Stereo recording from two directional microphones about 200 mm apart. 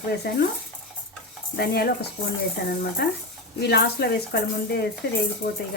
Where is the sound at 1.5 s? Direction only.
55° left (ahead or behind).